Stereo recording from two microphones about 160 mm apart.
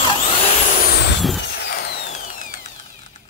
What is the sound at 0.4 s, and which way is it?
Vehicle, 55° left (ahead or behind).